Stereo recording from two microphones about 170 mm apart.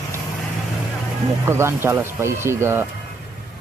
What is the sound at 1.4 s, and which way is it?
Speech, 15° right (ahead or behind).